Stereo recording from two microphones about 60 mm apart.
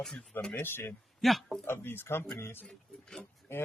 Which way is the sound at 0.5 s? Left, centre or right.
Left.